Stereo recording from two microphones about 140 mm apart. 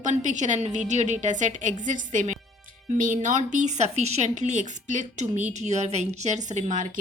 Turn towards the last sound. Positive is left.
turn(degrees=-60)  # may be behind; listen again after turning